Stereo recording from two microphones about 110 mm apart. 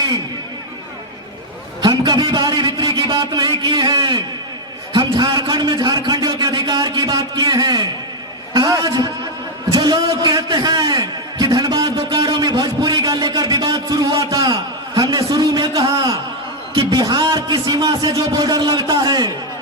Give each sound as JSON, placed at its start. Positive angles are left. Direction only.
{"t": 1.8, "sound": "a man's voice", "side_deg": -40}